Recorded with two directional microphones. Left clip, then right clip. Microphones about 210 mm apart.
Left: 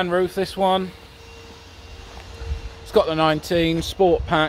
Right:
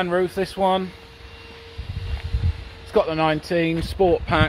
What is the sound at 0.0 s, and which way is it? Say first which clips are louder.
Speech: left 1 dB; 5° right (ahead or behind).